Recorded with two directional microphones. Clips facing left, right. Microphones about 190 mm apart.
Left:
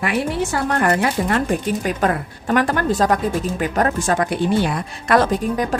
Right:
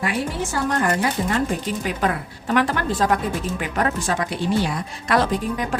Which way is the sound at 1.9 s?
45° left (ahead or behind).